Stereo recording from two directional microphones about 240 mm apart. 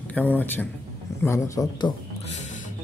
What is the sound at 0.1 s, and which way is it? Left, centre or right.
Speech, centre.